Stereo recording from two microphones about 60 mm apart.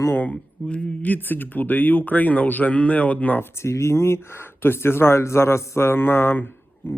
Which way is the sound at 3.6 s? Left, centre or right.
Left.